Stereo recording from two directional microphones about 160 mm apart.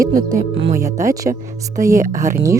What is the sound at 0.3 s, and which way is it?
Speech, 90° right.